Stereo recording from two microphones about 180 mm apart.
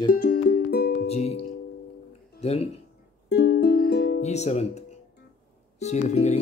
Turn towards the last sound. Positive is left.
turn(degrees=40)  # may be behind; listen again after turning